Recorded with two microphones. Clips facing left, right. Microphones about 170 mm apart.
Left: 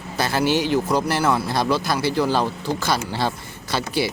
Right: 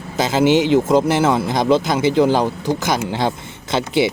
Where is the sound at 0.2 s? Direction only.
20° right (ahead or behind).